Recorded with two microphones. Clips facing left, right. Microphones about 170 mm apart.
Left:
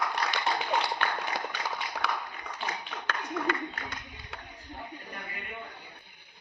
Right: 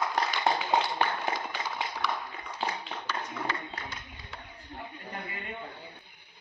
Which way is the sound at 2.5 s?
30° right (ahead or behind).